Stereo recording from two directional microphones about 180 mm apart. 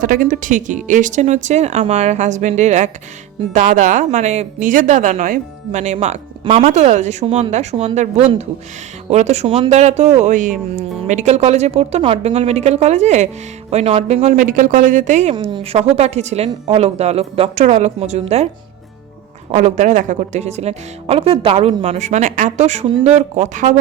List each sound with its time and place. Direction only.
0.0 s speech: 50° right (ahead or behind)
19.5 s speech: 40° right (ahead or behind)